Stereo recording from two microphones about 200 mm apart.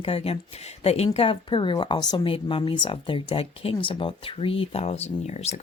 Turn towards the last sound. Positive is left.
turn(degrees=35)  # may be behind; listen again after turning